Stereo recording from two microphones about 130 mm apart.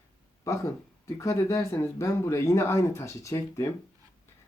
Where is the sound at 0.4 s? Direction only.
20° left (ahead or behind).